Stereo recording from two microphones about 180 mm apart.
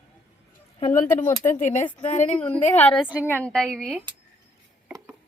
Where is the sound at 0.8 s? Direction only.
45° left (ahead or behind).